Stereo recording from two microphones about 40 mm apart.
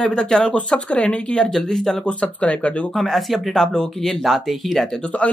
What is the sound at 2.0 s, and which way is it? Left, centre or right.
Speech, left.